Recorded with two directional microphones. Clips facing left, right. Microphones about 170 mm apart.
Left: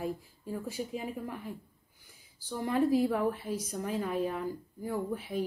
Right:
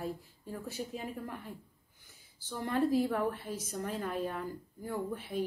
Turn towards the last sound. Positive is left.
turn(degrees=10)  # may be behind; listen again after turning